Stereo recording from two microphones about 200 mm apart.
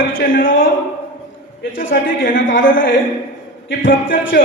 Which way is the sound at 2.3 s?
65° left (ahead or behind).